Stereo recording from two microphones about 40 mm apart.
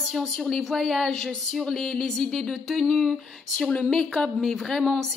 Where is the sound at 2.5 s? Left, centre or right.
Centre.